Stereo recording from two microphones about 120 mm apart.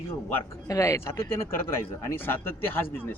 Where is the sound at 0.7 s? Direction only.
25° left (ahead or behind).